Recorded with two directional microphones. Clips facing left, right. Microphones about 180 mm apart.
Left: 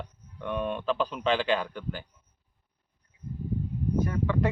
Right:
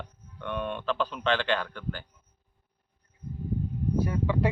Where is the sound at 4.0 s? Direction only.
10° right (ahead or behind).